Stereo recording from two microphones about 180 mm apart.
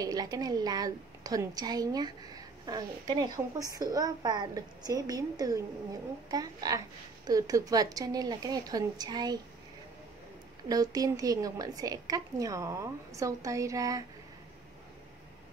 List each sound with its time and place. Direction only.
0.0 s a woman's voice: 20° right (ahead or behind)
10.7 s a woman's voice: 20° right (ahead or behind)